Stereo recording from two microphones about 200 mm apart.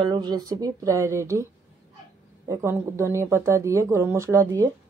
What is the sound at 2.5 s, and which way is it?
Speech, 15° right (ahead or behind).